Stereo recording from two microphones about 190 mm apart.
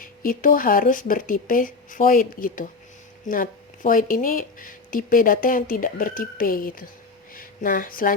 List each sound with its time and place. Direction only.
0.0 s speech: 45° left (ahead or behind)